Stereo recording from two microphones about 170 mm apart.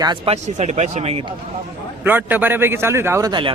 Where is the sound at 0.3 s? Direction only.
40° right (ahead or behind).